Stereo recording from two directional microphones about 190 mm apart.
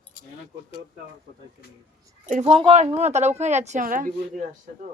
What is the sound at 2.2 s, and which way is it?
Speech, 40° right (ahead or behind).